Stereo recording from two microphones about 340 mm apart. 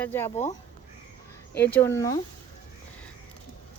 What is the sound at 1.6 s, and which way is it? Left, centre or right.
Speech, centre.